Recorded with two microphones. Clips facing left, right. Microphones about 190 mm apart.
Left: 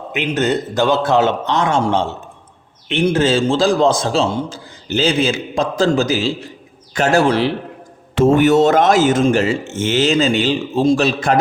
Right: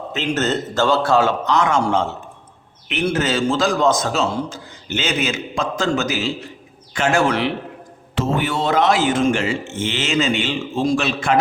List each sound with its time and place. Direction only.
0.3 s a man's voice: 15° left (ahead or behind); by 7.5 s 35° left (ahead or behind)
8.1 s a man's voice: 50° left (ahead or behind)